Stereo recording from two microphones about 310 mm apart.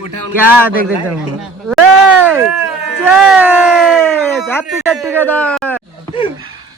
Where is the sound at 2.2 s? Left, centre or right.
Centre.